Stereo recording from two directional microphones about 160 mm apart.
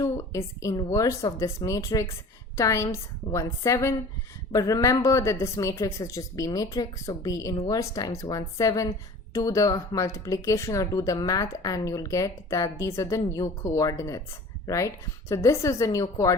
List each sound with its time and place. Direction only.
0.0 s speech: 20° left (ahead or behind)